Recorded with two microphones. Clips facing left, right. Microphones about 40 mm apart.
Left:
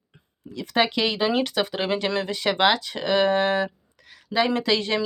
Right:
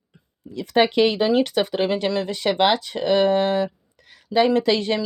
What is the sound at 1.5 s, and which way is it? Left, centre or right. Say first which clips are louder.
Speech: right 3 dB; centre.